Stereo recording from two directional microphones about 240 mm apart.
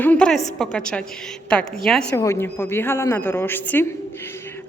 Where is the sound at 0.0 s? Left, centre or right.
Centre.